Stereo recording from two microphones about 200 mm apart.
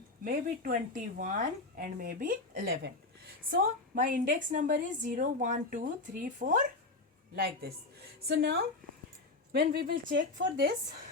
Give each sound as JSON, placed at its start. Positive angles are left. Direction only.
{"t": 0.3, "sound": "speech", "side_deg": -45}
{"t": 7.3, "sound": "a woman's voice", "side_deg": -50}